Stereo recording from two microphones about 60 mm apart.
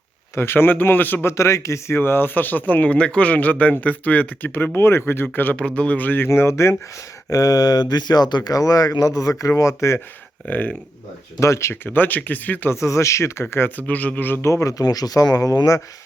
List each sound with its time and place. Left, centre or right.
0.3 s a man's voice: left
1.3 s speech: left
2.0 s a man's voice: left
5.5 s speech: centre
6.2 s speech: left
7.3 s speech: left
10.5 s speech: left
11.3 s speech: left
11.7 s a man's voice: left
12.7 s speech: left
13.5 s a man's voice: left
14.4 s speech: left